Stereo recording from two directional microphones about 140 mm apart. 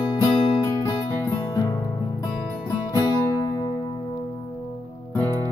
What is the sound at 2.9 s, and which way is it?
Music, 30° left (ahead or behind).